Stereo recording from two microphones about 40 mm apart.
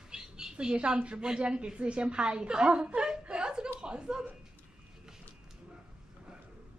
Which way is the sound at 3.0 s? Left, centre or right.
Centre.